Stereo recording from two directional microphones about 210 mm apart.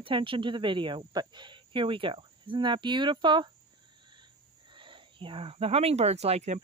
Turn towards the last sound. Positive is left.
turn(degrees=-30)  # may be behind; listen again after turning